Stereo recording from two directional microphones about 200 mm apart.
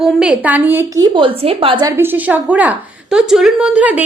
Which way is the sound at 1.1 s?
30° right (ahead or behind).